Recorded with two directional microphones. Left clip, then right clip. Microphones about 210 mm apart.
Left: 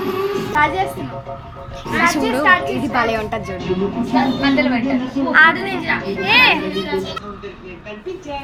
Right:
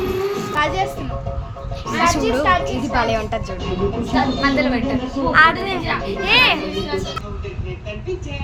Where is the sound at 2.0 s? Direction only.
10° right (ahead or behind).